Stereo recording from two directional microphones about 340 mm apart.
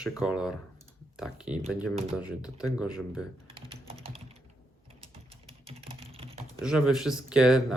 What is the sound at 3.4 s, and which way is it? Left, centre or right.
Typing, centre.